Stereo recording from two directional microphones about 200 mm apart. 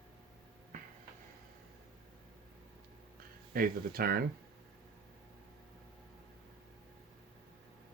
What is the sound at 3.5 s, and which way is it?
Speech, 45° right (ahead or behind).